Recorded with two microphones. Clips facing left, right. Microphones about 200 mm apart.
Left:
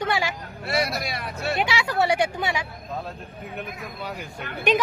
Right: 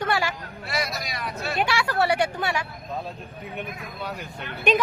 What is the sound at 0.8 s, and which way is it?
Speech, 60° left (ahead or behind).